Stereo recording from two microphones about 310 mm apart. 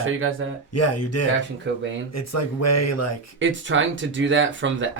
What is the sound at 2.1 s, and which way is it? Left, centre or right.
Speech, left.